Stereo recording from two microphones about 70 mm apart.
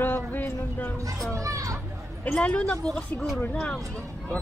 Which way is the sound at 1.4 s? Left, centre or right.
Right.